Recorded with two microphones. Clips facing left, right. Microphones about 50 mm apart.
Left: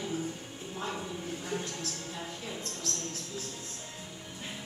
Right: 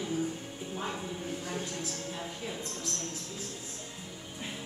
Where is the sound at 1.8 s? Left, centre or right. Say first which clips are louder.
Right 1 dB; centre.